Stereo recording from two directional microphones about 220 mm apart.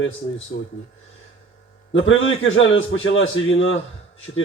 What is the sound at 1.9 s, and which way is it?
A man's voice, 60° left (ahead or behind).